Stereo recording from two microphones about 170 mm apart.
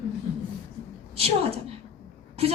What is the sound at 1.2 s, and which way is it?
Speech, 35° right (ahead or behind).